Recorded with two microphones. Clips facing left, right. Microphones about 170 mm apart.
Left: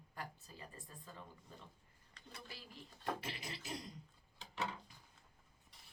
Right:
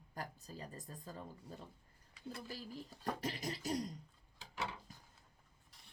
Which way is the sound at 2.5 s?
40° right (ahead or behind).